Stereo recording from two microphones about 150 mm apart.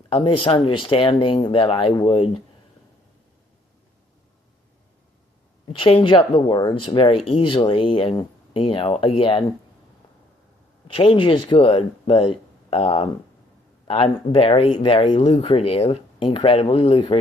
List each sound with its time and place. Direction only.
0.1 s speech: 35° left (ahead or behind)
5.6 s speech: 40° left (ahead or behind)
10.9 s speech: 35° left (ahead or behind)